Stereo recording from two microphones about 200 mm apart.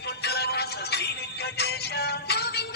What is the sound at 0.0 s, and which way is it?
Music, 55° left (ahead or behind).